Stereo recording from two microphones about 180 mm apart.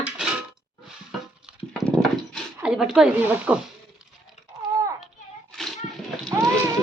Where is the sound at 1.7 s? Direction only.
5° left (ahead or behind).